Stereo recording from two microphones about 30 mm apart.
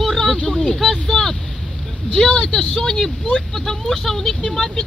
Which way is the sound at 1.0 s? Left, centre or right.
Centre.